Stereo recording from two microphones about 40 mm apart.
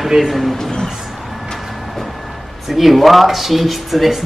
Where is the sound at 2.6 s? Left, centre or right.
Centre.